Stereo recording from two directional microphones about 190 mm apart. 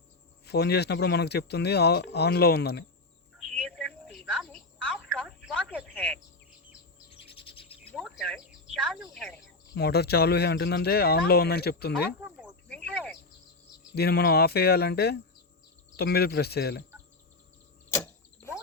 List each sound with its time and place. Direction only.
0.4 s speech: 60° left (ahead or behind)
3.3 s telephone: centre (ahead or behind)
7.3 s owl: 30° left (ahead or behind)
7.9 s a woman's voice: centre (ahead or behind)
9.7 s speech: 60° left (ahead or behind)
12.2 s a sound: 5° right (ahead or behind)
13.9 s speech: 60° left (ahead or behind)
17.9 s power windows: 15° left (ahead or behind)